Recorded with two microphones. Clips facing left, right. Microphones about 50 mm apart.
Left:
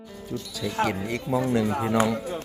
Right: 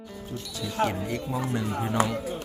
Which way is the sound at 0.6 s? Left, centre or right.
Left.